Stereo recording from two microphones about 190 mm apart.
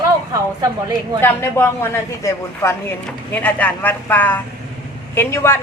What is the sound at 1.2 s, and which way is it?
A woman's voice, 10° left (ahead or behind).